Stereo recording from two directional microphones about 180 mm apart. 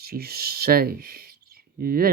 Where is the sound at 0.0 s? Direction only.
60° right (ahead or behind).